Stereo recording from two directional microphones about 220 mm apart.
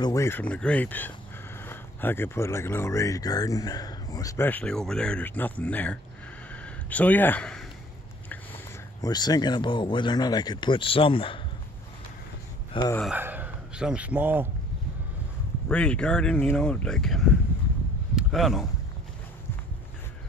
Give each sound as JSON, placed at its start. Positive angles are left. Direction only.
{"t": 0.0, "sound": "speech", "side_deg": 15}
{"t": 6.5, "sound": "a sound", "side_deg": 5}
{"t": 9.0, "sound": "speech", "side_deg": 20}
{"t": 13.0, "sound": "speech", "side_deg": -5}
{"t": 15.7, "sound": "speech", "side_deg": 5}
{"t": 18.1, "sound": "a sound", "side_deg": 0}